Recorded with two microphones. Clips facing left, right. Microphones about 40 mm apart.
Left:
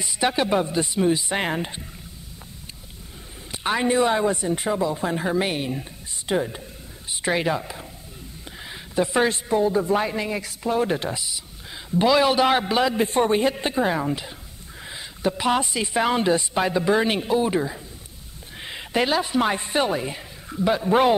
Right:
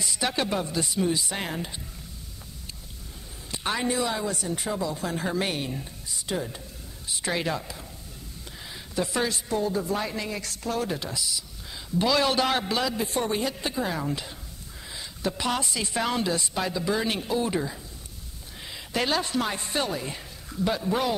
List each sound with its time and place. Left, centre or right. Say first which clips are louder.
0.0 s speech: left 5 dB; centre
3.5 s speech: left 6 dB; left
10.9 s a man's voice: left 5 dB; left
12.9 s speech: left 7 dB; left; by 17.7 s centre
18.6 s a sound: left 5 dB; left
18.9 s a woman's voice: left 5 dB; centre
19.4 s a man's voice: left 6 dB; left